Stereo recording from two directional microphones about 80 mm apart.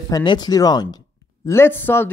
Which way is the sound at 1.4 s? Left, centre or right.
Left.